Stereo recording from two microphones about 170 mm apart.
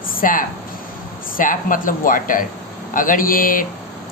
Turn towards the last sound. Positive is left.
turn(degrees=55)  # may be behind; listen again after turning